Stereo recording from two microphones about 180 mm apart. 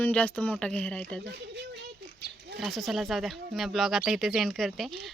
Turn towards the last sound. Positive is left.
turn(degrees=0)  # may be behind; listen again after turning